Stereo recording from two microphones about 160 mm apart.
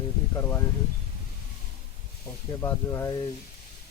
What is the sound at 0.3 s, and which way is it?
Speech, 15° left (ahead or behind).